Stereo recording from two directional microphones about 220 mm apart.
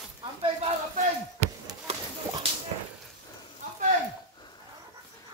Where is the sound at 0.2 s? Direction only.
25° right (ahead or behind).